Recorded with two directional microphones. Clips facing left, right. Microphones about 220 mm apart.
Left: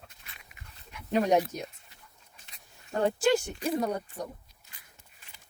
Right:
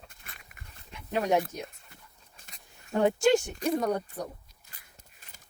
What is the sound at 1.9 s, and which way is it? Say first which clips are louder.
Dog: right 2 dB; 45° right (ahead or behind).